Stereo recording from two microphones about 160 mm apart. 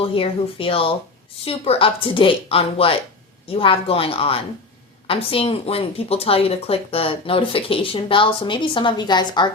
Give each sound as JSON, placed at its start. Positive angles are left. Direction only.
{"t": 0.0, "sound": "speech", "side_deg": 35}